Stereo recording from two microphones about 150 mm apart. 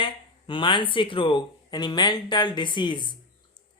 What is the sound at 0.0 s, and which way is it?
Speech, 35° left (ahead or behind).